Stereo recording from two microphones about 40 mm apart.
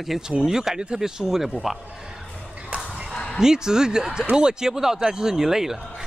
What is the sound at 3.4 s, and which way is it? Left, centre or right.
Speech, centre.